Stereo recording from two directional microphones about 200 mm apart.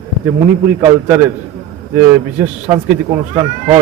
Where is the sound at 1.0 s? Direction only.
10° right (ahead or behind).